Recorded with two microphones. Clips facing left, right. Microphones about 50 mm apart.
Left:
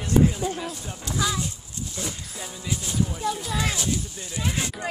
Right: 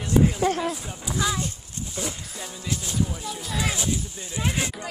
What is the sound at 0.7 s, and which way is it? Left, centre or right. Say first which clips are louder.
Speech: even; centre.